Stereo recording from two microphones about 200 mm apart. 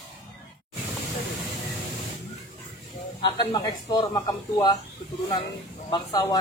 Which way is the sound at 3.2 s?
20° left (ahead or behind).